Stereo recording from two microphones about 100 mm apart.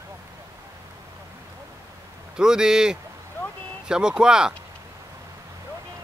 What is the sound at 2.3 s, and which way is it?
Speech, 5° right (ahead or behind).